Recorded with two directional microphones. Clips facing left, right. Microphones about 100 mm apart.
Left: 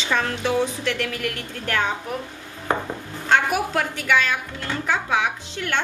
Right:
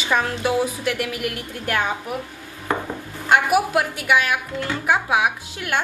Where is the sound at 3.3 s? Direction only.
10° right (ahead or behind).